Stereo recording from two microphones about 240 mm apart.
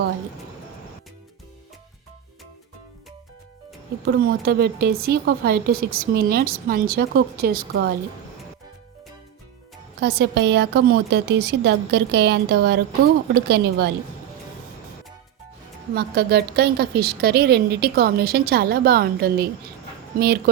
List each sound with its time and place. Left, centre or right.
4.0 s a woman's voice: right
10.0 s a woman's voice: right
16.0 s a woman's voice: right